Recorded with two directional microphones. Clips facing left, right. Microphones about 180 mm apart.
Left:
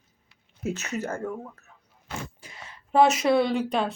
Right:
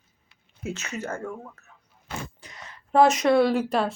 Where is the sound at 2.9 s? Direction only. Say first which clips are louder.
Right 1 dB; 5° left (ahead or behind).